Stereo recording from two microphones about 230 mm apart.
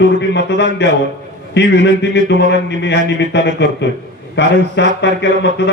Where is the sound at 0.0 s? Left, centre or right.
Left.